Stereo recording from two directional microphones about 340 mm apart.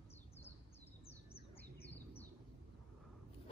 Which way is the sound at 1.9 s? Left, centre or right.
Centre.